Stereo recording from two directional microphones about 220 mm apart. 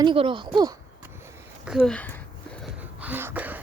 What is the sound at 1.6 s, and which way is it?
Speech, 5° right (ahead or behind).